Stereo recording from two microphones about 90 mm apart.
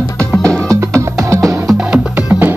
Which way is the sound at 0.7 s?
35° right (ahead or behind).